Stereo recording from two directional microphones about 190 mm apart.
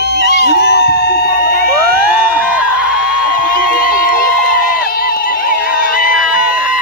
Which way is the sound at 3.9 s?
50° left (ahead or behind).